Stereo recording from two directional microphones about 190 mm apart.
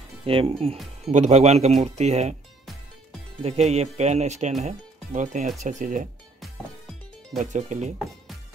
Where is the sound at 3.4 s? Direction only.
35° right (ahead or behind).